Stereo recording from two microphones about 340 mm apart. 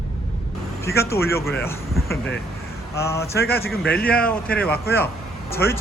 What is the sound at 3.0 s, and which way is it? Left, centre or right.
Speech, centre.